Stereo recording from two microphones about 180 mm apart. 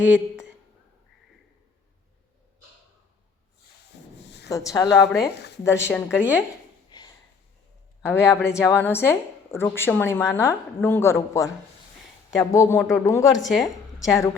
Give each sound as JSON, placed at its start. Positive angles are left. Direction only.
{"t": 0.0, "sound": "speech", "side_deg": -5}
{"t": 4.7, "sound": "a woman's voice", "side_deg": 20}
{"t": 6.1, "sound": "speech", "side_deg": -5}
{"t": 6.9, "sound": "a sound", "side_deg": 25}
{"t": 8.0, "sound": "a woman's voice", "side_deg": 15}
{"t": 13.5, "sound": "a woman's voice", "side_deg": 0}